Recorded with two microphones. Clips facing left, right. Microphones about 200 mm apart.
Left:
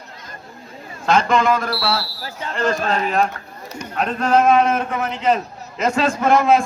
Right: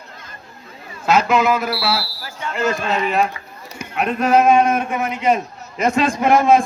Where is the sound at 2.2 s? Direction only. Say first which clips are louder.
Even; 35° left (ahead or behind).